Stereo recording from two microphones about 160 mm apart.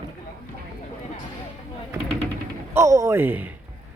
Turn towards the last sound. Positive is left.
turn(degrees=-10)  # may be behind; listen again after turning